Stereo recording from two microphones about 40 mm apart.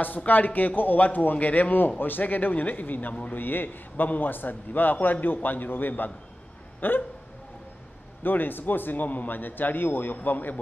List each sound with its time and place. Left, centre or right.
0.3 s a man's voice: left
8.2 s a man's voice: left